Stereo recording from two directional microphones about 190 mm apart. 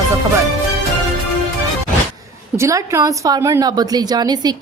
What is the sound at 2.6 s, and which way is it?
A woman's voice, 15° right (ahead or behind).